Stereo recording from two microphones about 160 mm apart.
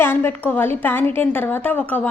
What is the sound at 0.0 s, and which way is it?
Speech, 15° left (ahead or behind).